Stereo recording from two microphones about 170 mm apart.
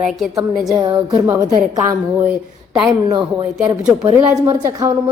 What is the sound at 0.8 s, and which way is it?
A woman's voice, 20° right (ahead or behind).